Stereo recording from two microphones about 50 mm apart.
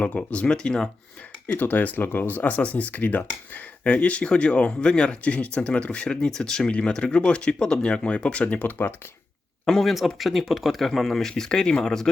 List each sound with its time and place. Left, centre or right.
0.3 s speech: left
1.5 s speech: left
8.5 s speech: left
9.6 s speech: centre